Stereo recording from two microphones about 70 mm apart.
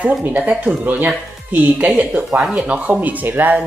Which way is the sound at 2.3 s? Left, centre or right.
Centre.